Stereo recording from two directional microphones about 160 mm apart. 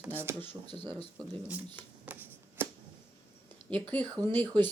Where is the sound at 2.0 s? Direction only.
10° right (ahead or behind).